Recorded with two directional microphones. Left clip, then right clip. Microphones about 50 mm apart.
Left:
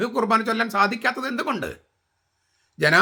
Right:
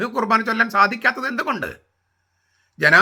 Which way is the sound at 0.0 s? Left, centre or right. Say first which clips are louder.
Right 2 dB; left.